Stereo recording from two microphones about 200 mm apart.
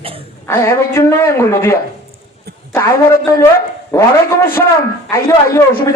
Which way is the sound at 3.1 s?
15° left (ahead or behind).